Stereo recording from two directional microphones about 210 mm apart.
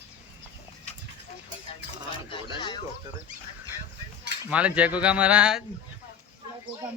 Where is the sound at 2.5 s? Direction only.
20° left (ahead or behind).